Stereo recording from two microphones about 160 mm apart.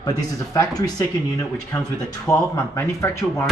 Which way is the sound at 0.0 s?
20° left (ahead or behind).